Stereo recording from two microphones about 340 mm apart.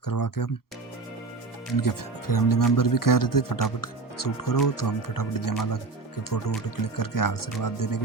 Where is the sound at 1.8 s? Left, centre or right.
Left.